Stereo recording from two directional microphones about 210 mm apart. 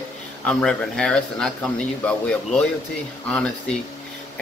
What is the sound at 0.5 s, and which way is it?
Speech, 5° left (ahead or behind).